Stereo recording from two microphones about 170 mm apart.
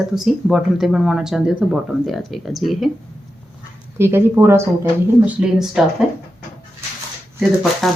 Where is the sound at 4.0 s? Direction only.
15° right (ahead or behind).